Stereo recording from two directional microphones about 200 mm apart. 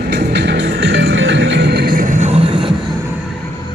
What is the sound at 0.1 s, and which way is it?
Music, 55° right (ahead or behind).